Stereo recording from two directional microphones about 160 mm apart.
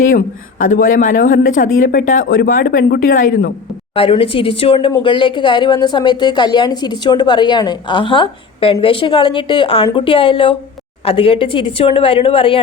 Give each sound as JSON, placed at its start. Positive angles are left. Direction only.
{"t": 0.6, "sound": "speech", "side_deg": 55}
{"t": 3.9, "sound": "speech", "side_deg": 35}